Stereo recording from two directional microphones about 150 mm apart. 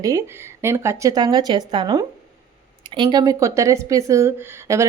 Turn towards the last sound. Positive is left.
turn(degrees=-20)  # may be behind; listen again after turning